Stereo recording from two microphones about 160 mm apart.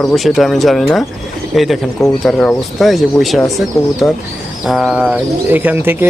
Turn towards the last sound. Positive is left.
turn(degrees=-10)  # may be behind; listen again after turning